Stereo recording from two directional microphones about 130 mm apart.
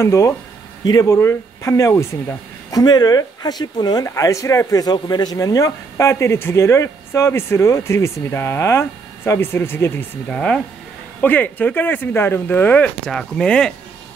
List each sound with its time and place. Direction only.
0.0 s speech: 25° left (ahead or behind); by 13.7 s 5° left (ahead or behind)